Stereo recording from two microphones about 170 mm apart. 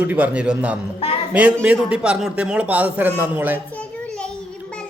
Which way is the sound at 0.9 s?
35° left (ahead or behind).